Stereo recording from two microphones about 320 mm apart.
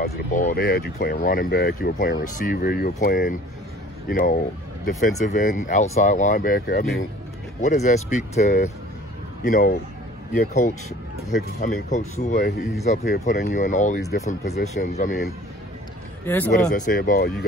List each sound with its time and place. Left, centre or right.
0.0 s speech: left
16.3 s speech: centre
16.7 s speech: left